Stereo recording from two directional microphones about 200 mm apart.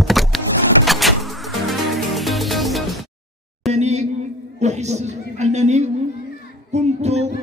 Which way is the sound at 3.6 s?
35° right (ahead or behind).